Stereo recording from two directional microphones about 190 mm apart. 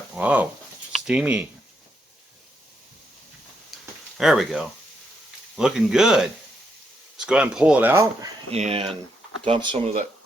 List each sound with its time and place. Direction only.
0.1 s speech: 5° right (ahead or behind)
3.7 s a sound: centre (ahead or behind)
4.2 s speech: centre (ahead or behind)
7.3 s speech: 5° right (ahead or behind)
8.4 s speech: 35° right (ahead or behind)